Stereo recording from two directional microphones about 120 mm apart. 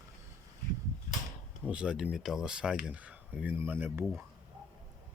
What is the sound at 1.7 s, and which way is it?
Speech, 10° right (ahead or behind).